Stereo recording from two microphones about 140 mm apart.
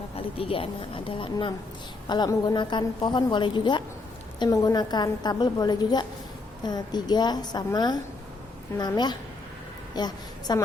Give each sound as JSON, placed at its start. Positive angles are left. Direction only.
{"t": 0.2, "sound": "a woman's voice", "side_deg": 40}